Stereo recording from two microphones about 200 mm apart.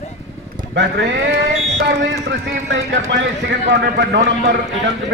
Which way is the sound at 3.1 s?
60° right (ahead or behind).